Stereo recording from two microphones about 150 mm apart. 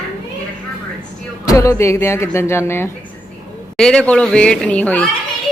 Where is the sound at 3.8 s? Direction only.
5° left (ahead or behind).